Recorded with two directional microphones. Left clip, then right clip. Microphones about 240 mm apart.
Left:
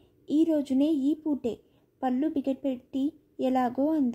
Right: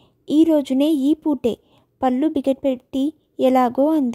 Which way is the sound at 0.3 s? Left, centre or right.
Right.